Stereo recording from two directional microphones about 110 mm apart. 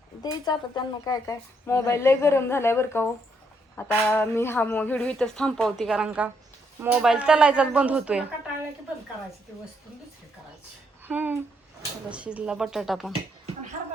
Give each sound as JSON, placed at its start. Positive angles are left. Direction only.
{"t": 0.2, "sound": "speech", "side_deg": 40}
{"t": 1.6, "sound": "a woman's voice", "side_deg": 25}
{"t": 5.1, "sound": "speech", "side_deg": 5}
{"t": 5.7, "sound": "speech", "side_deg": -5}
{"t": 11.1, "sound": "speech", "side_deg": -15}